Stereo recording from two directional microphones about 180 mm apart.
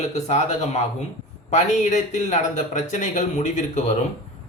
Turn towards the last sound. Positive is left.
turn(degrees=45)  # may be behind; listen again after turning